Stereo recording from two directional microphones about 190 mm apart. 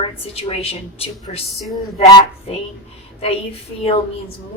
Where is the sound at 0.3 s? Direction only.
30° left (ahead or behind).